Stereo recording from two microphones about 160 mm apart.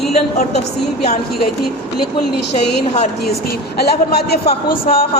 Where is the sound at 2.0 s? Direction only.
90° left.